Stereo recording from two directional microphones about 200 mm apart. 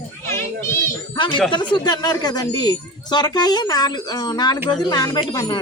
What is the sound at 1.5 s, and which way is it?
Speech, 20° left (ahead or behind).